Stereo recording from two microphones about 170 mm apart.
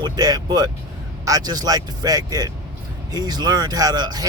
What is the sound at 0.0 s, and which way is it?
Speech, 20° right (ahead or behind).